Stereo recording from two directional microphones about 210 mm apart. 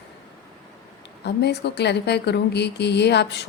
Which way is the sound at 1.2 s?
50° left (ahead or behind).